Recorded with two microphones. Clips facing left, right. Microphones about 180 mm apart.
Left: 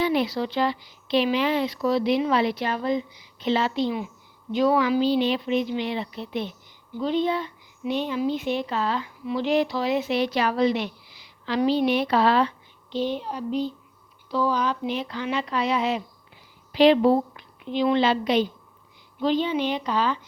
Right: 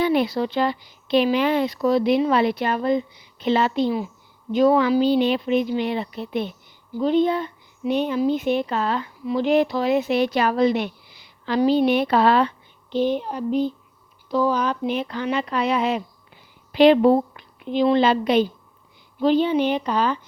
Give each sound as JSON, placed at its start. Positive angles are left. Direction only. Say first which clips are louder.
{"t": 0.0, "sound": "a woman's voice", "louder": "right 3 dB", "side_deg": -55}